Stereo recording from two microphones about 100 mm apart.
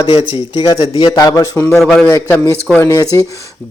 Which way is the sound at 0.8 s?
60° left (ahead or behind).